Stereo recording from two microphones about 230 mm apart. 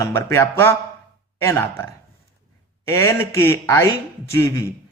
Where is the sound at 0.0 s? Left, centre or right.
Centre.